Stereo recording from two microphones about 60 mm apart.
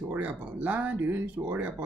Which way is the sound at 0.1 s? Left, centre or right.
Right.